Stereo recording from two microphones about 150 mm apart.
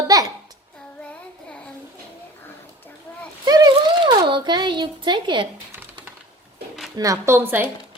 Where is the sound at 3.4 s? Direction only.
25° right (ahead or behind).